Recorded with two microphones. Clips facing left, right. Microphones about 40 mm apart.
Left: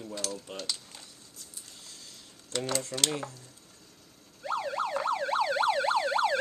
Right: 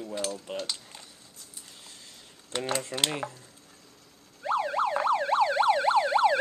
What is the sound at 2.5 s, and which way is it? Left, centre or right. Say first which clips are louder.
Speech: right 2 dB; right.